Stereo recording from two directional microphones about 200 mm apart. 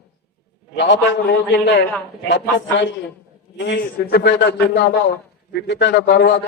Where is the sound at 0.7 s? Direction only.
65° left (ahead or behind).